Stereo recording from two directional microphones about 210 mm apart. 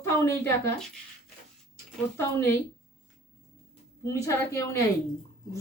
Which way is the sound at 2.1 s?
10° left (ahead or behind).